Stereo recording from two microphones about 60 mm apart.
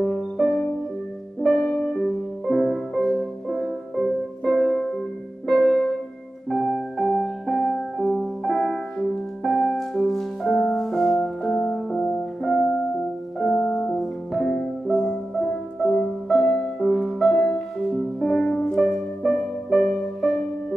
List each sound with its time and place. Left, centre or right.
0.0 s music: centre
1.6 s music: centre
14.5 s music: centre
15.3 s music: centre